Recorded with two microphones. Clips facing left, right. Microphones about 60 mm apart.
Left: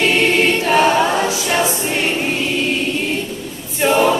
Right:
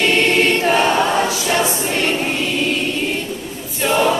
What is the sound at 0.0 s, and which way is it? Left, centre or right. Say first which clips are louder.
Choir: even; centre.